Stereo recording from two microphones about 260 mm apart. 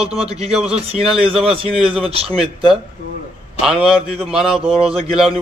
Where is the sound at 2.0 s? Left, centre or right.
Right.